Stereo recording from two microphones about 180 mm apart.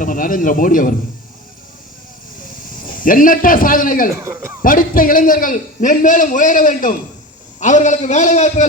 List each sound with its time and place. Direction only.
0.0 s a man's voice: 50° left (ahead or behind)
2.6 s a man's voice: 50° left (ahead or behind)
4.1 s a man's voice: 15° right (ahead or behind)
4.6 s a man's voice: 50° left (ahead or behind)